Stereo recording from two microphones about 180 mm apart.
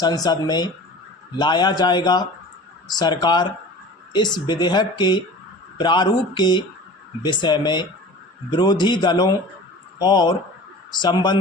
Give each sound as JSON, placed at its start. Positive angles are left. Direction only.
{"t": 0.0, "sound": "speech", "side_deg": 20}